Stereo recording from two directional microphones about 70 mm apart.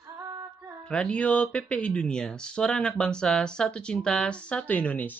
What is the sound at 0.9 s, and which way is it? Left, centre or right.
Speech, centre.